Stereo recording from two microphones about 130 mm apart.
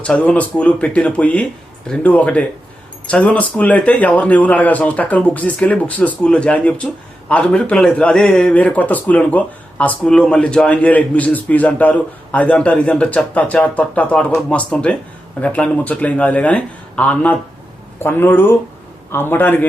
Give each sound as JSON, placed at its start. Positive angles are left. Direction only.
{"t": 0.0, "sound": "speech", "side_deg": 10}